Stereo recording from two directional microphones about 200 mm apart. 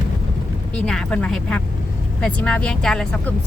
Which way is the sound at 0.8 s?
Centre (ahead or behind).